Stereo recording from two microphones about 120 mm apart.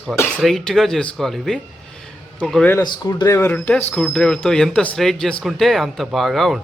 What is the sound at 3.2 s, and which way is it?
A man's voice, 20° left (ahead or behind).